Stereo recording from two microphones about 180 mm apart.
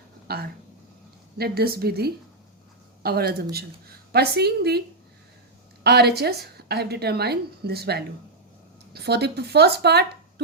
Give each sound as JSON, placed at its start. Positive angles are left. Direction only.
{"t": 0.3, "sound": "a woman's voice", "side_deg": -60}
{"t": 5.8, "sound": "a woman's voice", "side_deg": -65}